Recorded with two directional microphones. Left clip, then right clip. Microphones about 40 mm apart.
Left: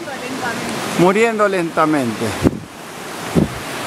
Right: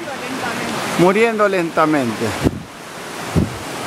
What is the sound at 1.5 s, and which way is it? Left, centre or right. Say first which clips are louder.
Speech: even; centre.